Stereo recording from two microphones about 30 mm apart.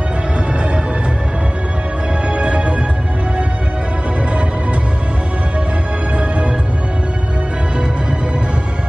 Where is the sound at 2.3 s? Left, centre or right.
Right.